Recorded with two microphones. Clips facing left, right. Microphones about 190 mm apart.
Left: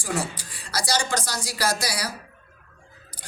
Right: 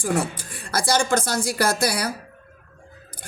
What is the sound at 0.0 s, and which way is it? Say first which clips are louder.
Speech: right 5 dB; 55° right (ahead or behind).